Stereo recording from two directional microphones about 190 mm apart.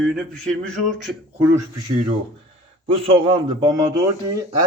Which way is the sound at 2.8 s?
30° right (ahead or behind).